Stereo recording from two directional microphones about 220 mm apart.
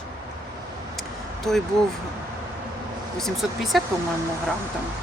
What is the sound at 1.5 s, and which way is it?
Speech, centre (ahead or behind).